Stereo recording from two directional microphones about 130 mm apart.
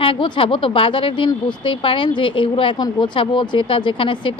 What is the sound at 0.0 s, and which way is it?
Speech, 40° left (ahead or behind).